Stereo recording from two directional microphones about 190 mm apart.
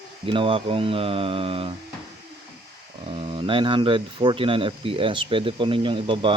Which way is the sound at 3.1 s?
25° right (ahead or behind).